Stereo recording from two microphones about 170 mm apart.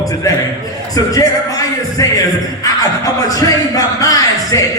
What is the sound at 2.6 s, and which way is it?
Speech, 20° left (ahead or behind).